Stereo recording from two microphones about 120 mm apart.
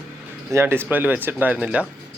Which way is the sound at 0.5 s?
20° right (ahead or behind).